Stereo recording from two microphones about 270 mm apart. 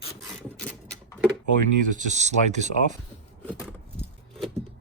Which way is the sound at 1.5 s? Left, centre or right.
Right.